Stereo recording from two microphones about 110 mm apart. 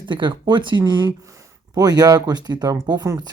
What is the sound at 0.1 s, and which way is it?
Speech, 45° right (ahead or behind).